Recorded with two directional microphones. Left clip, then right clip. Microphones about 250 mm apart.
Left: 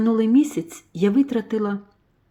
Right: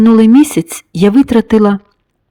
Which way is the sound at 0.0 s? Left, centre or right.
Right.